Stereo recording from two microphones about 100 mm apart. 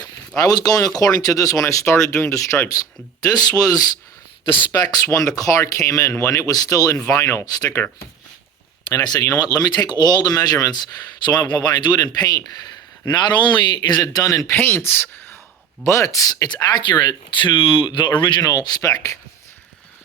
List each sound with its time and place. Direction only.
0.3 s speech: 40° left (ahead or behind)
7.4 s speech: 40° left (ahead or behind)
8.9 s speech: 40° left (ahead or behind)
14.5 s speech: 20° left (ahead or behind); by 18.4 s 50° left (ahead or behind)
18.4 s speech: 40° left (ahead or behind)